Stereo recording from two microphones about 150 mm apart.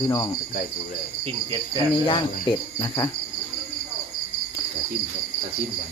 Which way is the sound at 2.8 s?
25° left (ahead or behind).